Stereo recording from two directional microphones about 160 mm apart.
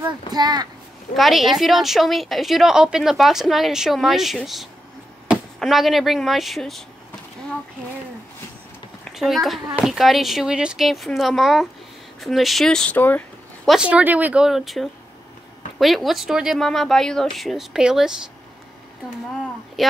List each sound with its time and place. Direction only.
0.3 s a child's voice: 25° right (ahead or behind)
1.1 s a woman's voice: centre (ahead or behind)
9.1 s a woman's voice: centre (ahead or behind)
13.7 s a woman's voice: 5° right (ahead or behind)
19.8 s speech: centre (ahead or behind)